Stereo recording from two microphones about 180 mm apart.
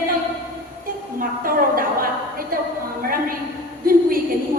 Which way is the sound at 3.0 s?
55° right (ahead or behind).